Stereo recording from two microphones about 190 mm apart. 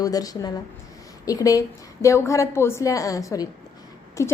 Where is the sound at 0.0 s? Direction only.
20° left (ahead or behind).